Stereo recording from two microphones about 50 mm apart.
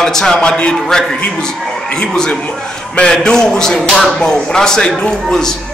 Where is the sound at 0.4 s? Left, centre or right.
Left.